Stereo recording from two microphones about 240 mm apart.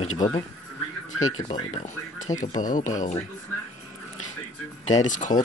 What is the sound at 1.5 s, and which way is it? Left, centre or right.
Speech, left.